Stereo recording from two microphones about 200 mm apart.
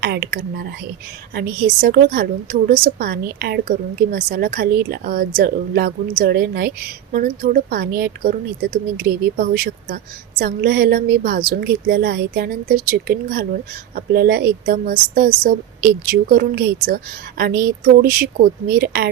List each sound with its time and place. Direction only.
0.0 s a woman's voice: 55° right (ahead or behind)